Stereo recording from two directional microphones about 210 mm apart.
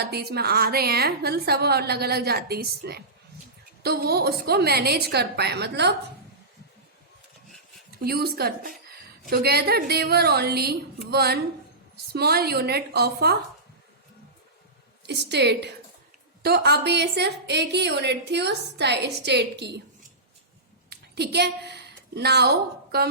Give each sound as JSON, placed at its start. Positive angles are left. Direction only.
{"t": 0.0, "sound": "a woman's voice", "side_deg": -50}
{"t": 7.9, "sound": "a woman's voice", "side_deg": -45}
{"t": 15.0, "sound": "a woman's voice", "side_deg": -55}
{"t": 20.9, "sound": "a sound", "side_deg": -50}